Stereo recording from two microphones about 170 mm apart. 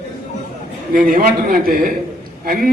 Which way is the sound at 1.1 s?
55° right (ahead or behind).